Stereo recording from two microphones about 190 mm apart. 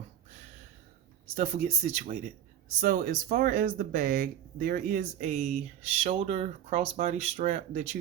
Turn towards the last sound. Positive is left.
turn(degrees=-35)  # may be behind; listen again after turning